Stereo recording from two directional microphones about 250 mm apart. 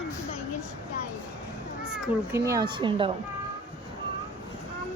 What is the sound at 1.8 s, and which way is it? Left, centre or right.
Cat, centre.